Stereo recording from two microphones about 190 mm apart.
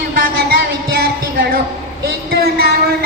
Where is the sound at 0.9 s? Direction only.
55° right (ahead or behind).